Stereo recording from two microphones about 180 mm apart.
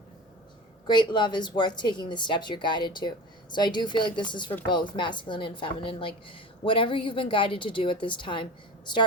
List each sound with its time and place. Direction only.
0.9 s a woman's voice: 25° left (ahead or behind)